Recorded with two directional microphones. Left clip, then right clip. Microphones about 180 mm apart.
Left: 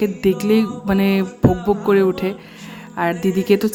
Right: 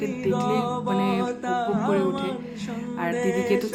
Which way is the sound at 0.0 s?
45° left (ahead or behind).